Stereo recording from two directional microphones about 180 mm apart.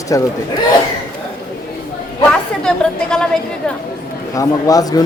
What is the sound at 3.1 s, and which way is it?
Speech, 5° left (ahead or behind).